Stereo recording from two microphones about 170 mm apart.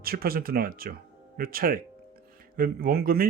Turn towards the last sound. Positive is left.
turn(degrees=-60)  # may be behind; listen again after turning